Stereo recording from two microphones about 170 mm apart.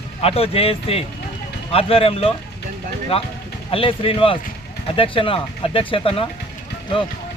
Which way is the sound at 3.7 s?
35° left (ahead or behind).